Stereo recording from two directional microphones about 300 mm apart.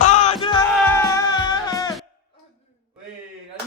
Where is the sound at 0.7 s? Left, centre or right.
Centre.